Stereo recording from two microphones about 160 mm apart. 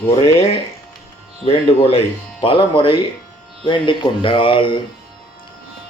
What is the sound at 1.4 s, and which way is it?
Speech, 40° left (ahead or behind).